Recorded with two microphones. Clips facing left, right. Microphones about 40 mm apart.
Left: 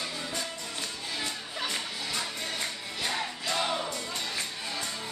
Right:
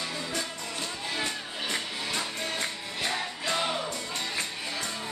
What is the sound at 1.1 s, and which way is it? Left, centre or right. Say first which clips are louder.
Music: right 2 dB; right.